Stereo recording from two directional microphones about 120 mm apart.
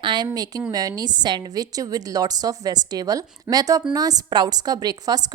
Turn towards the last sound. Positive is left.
turn(degrees=-35)  # may be behind; listen again after turning